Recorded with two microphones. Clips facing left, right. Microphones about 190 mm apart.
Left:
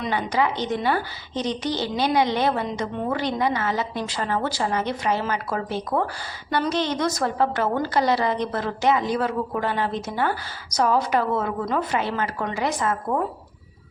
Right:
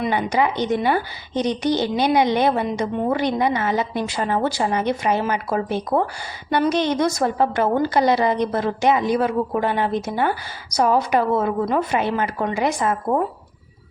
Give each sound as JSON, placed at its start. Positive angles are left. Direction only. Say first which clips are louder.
{"t": 0.0, "sound": "a woman's voice", "louder": "right 3 dB", "side_deg": -15}